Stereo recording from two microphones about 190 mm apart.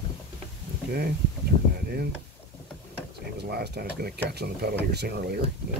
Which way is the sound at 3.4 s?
60° right (ahead or behind).